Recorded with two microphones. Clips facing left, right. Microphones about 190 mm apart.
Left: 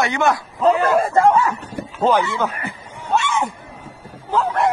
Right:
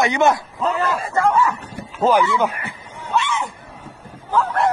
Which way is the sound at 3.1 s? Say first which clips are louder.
Left 2 dB; 45° left (ahead or behind).